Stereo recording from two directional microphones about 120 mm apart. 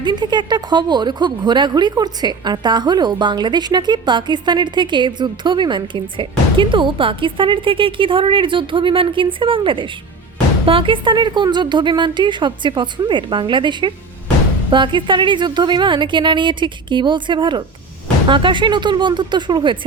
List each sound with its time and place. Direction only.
0.0 s speech: 35° right (ahead or behind)